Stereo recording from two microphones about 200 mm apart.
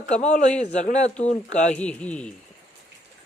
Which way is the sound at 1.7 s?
5° left (ahead or behind).